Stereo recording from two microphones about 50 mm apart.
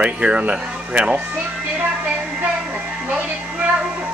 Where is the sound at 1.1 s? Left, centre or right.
Right.